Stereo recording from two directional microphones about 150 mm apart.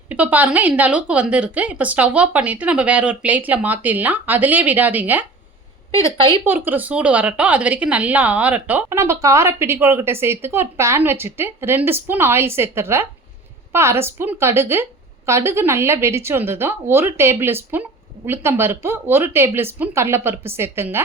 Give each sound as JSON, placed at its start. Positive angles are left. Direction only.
{"t": 0.1, "sound": "a woman's voice", "side_deg": -10}
{"t": 6.4, "sound": "a woman's voice", "side_deg": -15}